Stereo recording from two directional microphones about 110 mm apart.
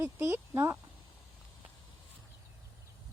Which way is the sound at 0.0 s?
20° right (ahead or behind).